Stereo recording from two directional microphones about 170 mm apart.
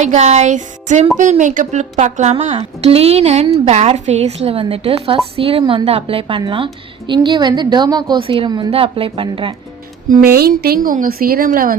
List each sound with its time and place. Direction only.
0.0 s a woman's voice: 45° right (ahead or behind)
10.3 s a woman's voice: 65° right (ahead or behind)